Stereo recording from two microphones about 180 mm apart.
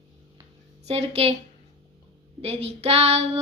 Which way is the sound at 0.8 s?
35° right (ahead or behind).